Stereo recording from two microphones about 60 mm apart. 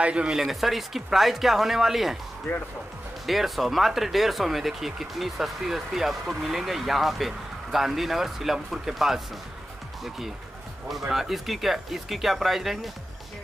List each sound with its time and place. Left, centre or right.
0.0 s speech: centre
0.4 s speech: centre
3.3 s speech: centre